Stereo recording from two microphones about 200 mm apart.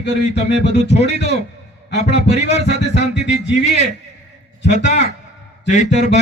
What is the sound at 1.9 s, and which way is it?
Speech, 60° left (ahead or behind).